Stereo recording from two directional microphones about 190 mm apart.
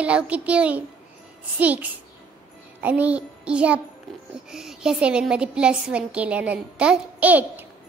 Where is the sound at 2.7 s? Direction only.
10° right (ahead or behind).